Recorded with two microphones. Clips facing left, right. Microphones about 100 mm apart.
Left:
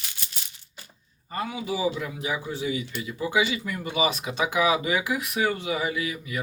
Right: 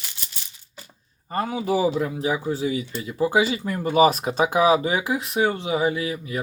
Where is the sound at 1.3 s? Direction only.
45° right (ahead or behind).